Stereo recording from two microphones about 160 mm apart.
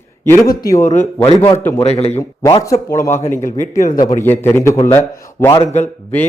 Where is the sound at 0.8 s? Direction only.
50° left (ahead or behind).